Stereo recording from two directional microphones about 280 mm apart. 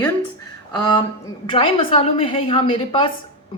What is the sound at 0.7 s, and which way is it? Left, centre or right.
A woman's voice, centre.